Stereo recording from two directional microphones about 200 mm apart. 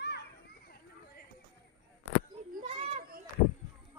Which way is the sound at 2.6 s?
30° right (ahead or behind).